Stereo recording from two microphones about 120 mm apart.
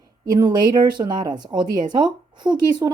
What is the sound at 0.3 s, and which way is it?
Speech, 35° right (ahead or behind).